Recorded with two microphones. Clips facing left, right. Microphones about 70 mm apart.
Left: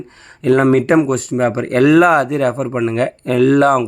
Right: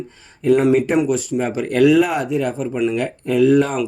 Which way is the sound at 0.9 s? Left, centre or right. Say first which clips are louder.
Left 4 dB; left.